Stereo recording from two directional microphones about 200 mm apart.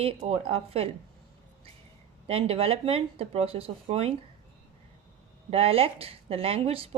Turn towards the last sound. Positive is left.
turn(degrees=-30)  # may be behind; listen again after turning